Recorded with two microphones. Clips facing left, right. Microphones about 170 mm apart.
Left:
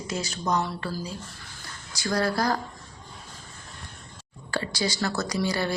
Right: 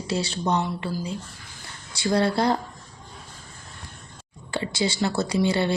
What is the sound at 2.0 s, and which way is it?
Speech, 25° right (ahead or behind).